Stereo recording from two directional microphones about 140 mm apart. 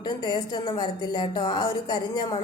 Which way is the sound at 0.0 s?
30° left (ahead or behind).